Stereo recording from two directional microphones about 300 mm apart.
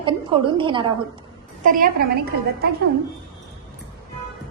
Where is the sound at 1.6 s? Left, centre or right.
Right.